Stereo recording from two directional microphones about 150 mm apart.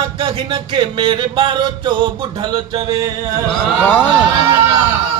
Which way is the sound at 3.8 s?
10° left (ahead or behind).